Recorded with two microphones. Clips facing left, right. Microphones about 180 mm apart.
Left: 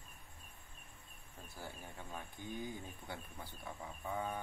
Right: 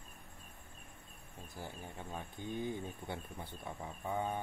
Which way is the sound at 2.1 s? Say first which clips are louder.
Right 4 dB; 20° right (ahead or behind).